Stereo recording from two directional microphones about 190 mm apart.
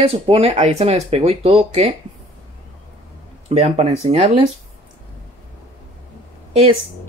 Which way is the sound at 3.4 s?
35° right (ahead or behind).